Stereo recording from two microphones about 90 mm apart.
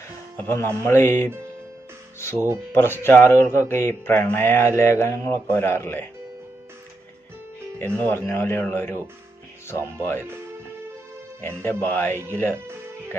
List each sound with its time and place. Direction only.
0.3 s speech: 25° left (ahead or behind)
2.3 s speech: 25° right (ahead or behind)
2.7 s speech: 25° left (ahead or behind)
7.9 s speech: 25° left (ahead or behind)
11.3 s speech: 25° left (ahead or behind)